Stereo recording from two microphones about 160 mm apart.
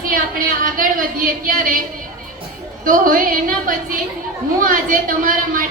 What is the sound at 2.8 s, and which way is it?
A woman's voice, 60° right (ahead or behind).